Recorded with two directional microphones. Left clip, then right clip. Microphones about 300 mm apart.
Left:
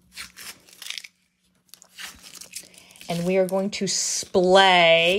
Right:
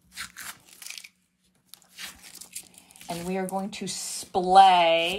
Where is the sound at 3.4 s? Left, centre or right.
Left.